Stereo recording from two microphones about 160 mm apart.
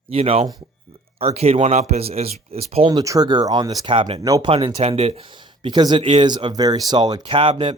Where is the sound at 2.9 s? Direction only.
20° right (ahead or behind).